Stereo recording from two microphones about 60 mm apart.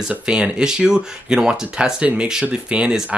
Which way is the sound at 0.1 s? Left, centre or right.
Centre.